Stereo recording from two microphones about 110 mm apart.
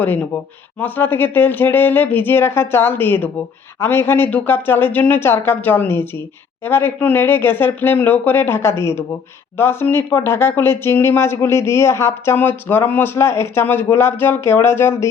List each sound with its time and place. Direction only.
0.8 s speech: 20° left (ahead or behind)